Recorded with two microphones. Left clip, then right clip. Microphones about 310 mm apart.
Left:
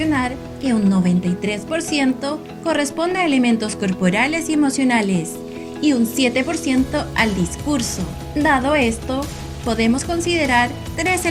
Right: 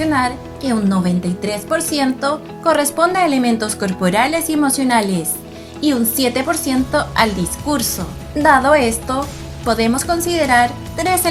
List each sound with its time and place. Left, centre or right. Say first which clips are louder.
0.6 s a woman's voice: right 1 dB; right